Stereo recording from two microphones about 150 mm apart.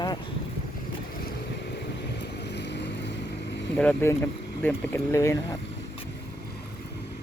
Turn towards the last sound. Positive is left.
turn(degrees=20)  # may be behind; listen again after turning